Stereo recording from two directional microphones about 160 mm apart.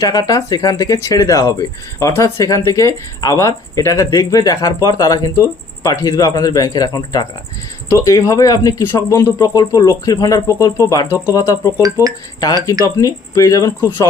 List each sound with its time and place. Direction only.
0.0 s speech: 25° left (ahead or behind)
12.8 s speech: 20° left (ahead or behind)